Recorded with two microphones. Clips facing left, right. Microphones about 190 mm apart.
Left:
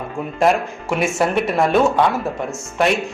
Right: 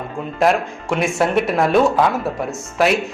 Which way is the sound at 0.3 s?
Centre (ahead or behind).